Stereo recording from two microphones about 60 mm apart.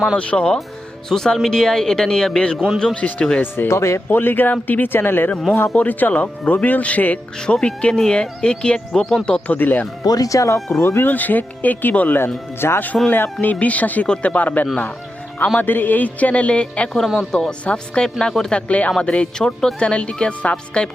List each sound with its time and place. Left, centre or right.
0.2 s speech: centre
3.4 s speech: left
3.7 s speech: left
4.1 s speech: left
5.7 s speech: left
7.3 s speech: centre
9.6 s speech: left
10.0 s speech: left
10.8 s speech: left
11.0 s speech: left
12.5 s speech: left; by 18.6 s centre
18.7 s speech: left